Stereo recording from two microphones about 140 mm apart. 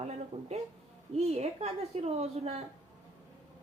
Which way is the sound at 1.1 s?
50° right (ahead or behind).